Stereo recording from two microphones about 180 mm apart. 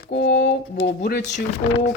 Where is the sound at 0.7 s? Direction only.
30° left (ahead or behind).